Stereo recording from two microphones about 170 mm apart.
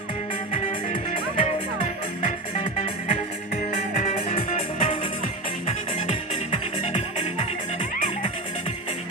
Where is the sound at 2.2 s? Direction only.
50° left (ahead or behind).